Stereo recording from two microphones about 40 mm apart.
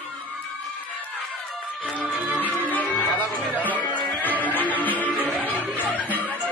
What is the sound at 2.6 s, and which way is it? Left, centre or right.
Music, left.